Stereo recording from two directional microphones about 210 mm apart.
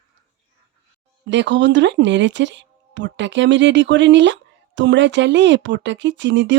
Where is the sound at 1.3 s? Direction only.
60° right (ahead or behind).